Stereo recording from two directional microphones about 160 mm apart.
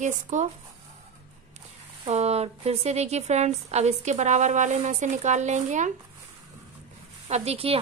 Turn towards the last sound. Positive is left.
turn(degrees=-40)  # may be behind; listen again after turning